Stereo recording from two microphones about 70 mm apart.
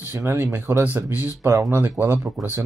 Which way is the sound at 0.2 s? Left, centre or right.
Right.